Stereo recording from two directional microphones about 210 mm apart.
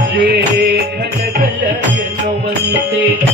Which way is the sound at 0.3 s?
50° right (ahead or behind).